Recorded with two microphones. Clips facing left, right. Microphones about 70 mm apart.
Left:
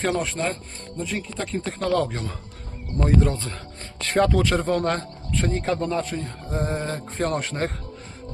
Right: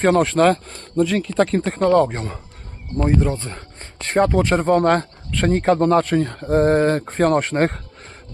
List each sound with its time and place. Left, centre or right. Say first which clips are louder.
0.0 s speech: right 10 dB; right
1.6 s speech: right 4 dB; right
3.0 s speech: right 2 dB; centre; by 5.0 s right
5.3 s speech: right 7 dB; right